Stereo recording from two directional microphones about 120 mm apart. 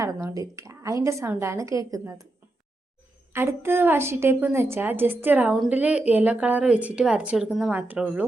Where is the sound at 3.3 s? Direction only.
20° right (ahead or behind).